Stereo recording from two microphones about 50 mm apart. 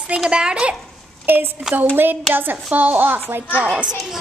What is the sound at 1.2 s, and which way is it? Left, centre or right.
Speech, right.